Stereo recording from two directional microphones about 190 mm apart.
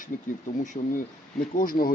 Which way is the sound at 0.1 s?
45° left (ahead or behind).